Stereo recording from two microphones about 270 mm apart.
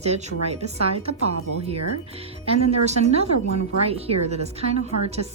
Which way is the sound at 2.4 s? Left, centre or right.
Right.